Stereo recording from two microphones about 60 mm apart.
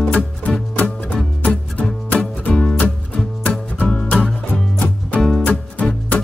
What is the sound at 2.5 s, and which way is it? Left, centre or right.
Music, left.